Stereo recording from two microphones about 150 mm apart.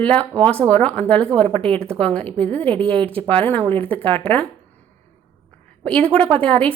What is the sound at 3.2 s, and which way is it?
Speech, 10° left (ahead or behind).